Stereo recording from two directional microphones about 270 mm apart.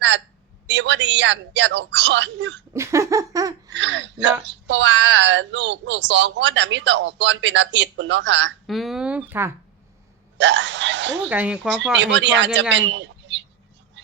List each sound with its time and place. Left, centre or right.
0.7 s speech: right
2.7 s laughter: centre
3.7 s speech: right
8.6 s speech: centre
10.3 s speech: right
11.2 s speech: centre
11.9 s speech: right
12.7 s a sound: right